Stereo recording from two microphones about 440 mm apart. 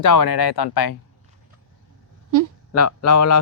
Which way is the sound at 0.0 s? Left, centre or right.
Left.